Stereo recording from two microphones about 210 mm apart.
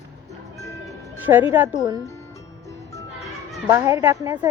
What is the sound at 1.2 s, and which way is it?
Speech, 10° right (ahead or behind).